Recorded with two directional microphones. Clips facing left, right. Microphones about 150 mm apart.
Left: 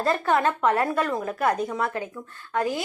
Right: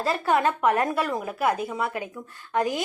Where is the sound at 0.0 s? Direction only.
10° right (ahead or behind).